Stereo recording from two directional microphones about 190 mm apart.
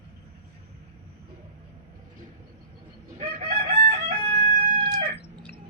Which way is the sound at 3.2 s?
40° right (ahead or behind).